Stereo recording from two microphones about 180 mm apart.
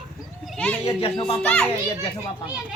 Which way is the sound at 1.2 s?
5° left (ahead or behind).